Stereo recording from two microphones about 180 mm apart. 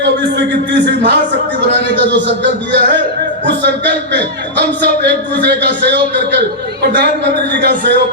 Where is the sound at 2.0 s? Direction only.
75° right (ahead or behind).